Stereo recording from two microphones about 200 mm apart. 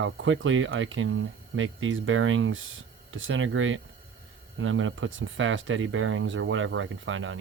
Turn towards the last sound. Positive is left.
turn(degrees=-75)  # may be behind; listen again after turning